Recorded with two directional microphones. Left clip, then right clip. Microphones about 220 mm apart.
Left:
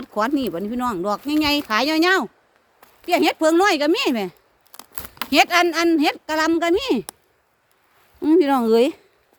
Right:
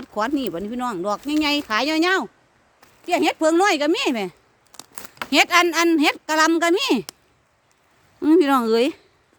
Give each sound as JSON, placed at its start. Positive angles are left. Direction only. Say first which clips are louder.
{"t": 0.0, "sound": "a woman's voice", "louder": "left 2 dB", "side_deg": 10}
{"t": 4.7, "sound": "tearing", "louder": "left 1 dB", "side_deg": 20}
{"t": 5.3, "sound": "a woman's voice", "louder": "even", "side_deg": 0}
{"t": 8.2, "sound": "a woman's voice", "louder": "even", "side_deg": -5}